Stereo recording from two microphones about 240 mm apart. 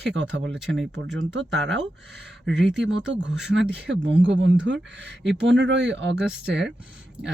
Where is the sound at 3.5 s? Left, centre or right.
Right.